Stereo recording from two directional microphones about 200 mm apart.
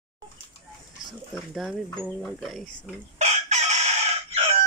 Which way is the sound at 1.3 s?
Centre (ahead or behind).